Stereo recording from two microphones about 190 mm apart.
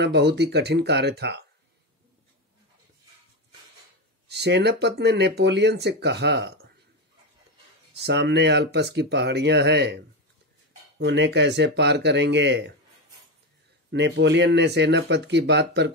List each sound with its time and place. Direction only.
0.0 s speech: 60° right (ahead or behind)
4.3 s speech: 60° right (ahead or behind)
7.9 s speech: 65° right (ahead or behind)
11.1 s speech: 70° right (ahead or behind)
13.8 s speech: 65° right (ahead or behind)